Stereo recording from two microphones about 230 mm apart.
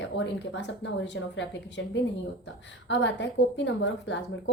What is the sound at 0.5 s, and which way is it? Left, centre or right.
A woman's voice, left.